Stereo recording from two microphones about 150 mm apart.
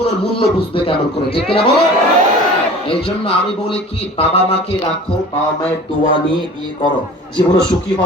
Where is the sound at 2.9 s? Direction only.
40° left (ahead or behind).